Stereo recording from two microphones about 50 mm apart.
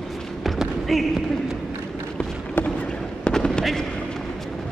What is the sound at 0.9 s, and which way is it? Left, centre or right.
Speech, centre.